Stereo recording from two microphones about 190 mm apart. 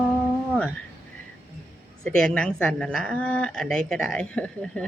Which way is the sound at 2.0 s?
5° left (ahead or behind).